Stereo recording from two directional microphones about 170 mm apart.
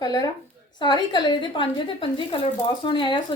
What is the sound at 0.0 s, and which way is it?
A woman's voice, 25° left (ahead or behind).